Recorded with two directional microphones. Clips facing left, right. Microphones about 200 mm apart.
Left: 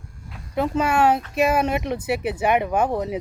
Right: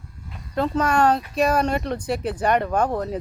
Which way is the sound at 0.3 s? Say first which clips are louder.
Even; 5° left (ahead or behind).